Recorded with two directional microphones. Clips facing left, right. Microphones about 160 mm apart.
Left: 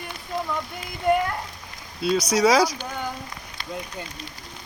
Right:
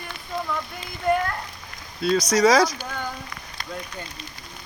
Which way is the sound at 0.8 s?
10° left (ahead or behind).